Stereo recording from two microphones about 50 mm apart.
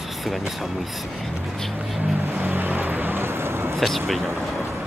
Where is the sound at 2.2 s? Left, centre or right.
Right.